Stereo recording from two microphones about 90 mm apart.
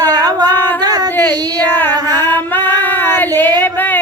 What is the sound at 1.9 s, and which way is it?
Speech, 50° right (ahead or behind).